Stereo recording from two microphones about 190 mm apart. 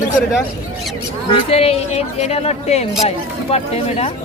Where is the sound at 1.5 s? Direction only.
30° left (ahead or behind).